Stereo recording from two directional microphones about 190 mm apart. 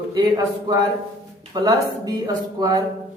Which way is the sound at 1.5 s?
20° right (ahead or behind).